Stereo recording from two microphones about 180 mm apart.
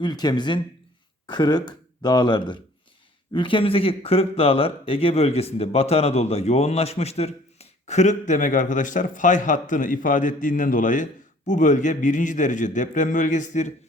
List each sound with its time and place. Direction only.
0.0 s speech: 25° left (ahead or behind); by 13.7 s 40° left (ahead or behind)